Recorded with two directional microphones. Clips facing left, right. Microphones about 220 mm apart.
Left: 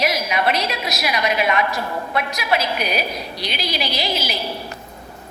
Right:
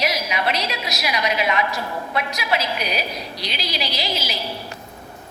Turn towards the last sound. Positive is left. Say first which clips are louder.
# left 3 dB
turn(degrees=55)  # may be behind; listen again after turning